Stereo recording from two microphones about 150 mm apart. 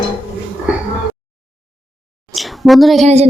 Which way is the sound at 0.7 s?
10° right (ahead or behind).